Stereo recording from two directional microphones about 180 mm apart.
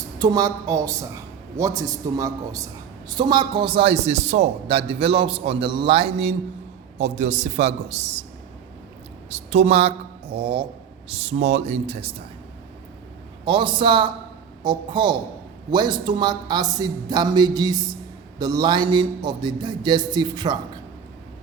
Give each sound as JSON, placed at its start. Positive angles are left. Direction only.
{"t": 0.2, "sound": "a man's voice", "side_deg": -20}
{"t": 9.3, "sound": "a man's voice", "side_deg": -40}
{"t": 13.4, "sound": "speech", "side_deg": -25}